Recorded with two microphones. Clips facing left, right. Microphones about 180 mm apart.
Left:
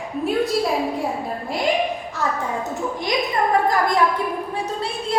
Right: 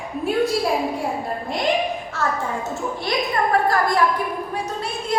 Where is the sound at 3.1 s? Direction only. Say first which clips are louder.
Even; 15° left (ahead or behind).